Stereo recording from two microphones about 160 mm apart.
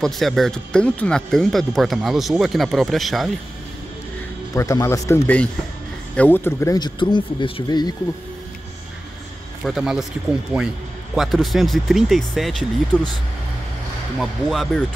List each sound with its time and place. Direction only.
0.0 s speech: centre (ahead or behind)
4.6 s speech: 20° left (ahead or behind)
9.7 s speech: 5° right (ahead or behind)
11.1 s speech: centre (ahead or behind)
14.2 s speech: centre (ahead or behind)